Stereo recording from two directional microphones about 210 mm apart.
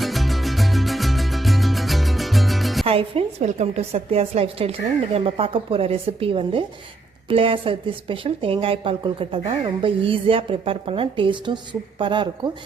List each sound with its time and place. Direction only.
0.0 s music: centre (ahead or behind)
2.8 s a woman's voice: 25° right (ahead or behind)